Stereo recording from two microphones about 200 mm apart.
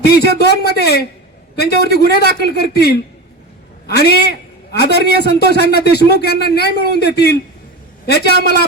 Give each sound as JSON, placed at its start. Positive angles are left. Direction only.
{"t": 0.0, "sound": "a man's voice", "side_deg": 55}
{"t": 4.7, "sound": "a man's voice", "side_deg": 55}